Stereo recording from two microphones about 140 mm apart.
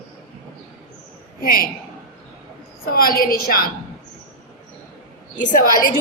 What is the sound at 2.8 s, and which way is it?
Speech, 90° left.